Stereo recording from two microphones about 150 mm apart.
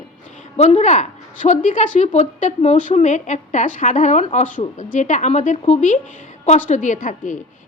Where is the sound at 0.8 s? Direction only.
55° left (ahead or behind).